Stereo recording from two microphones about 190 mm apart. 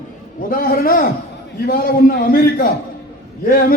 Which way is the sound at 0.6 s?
50° left (ahead or behind).